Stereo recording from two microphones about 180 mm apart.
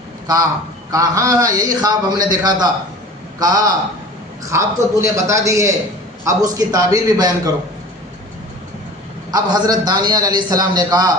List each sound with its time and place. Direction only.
0.3 s a man's voice: 20° right (ahead or behind)
9.3 s a man's voice: 20° right (ahead or behind)